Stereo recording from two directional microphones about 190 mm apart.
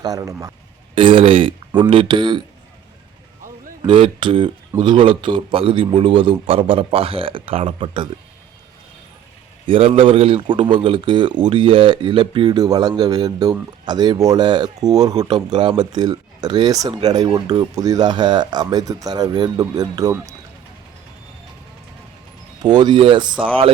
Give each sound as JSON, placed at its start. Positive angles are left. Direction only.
{"t": 0.0, "sound": "speech", "side_deg": -20}
{"t": 0.9, "sound": "a man's voice", "side_deg": -25}
{"t": 3.8, "sound": "a man's voice", "side_deg": -25}
{"t": 9.6, "sound": "a man's voice", "side_deg": -30}
{"t": 22.6, "sound": "a man's voice", "side_deg": -20}